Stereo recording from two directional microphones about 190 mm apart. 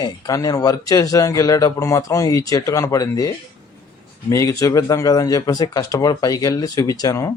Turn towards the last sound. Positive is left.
turn(degrees=15)  # may be behind; listen again after turning